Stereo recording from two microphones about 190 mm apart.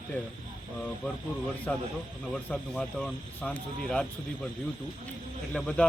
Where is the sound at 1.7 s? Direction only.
5° left (ahead or behind).